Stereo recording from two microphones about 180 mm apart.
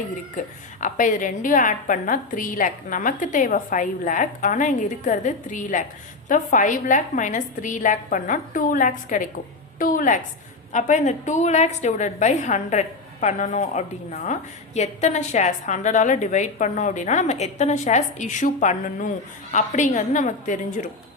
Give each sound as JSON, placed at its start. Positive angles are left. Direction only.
{"t": 0.3, "sound": "a woman's voice", "side_deg": 45}